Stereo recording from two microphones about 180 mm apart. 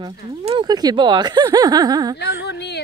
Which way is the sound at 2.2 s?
70° left (ahead or behind).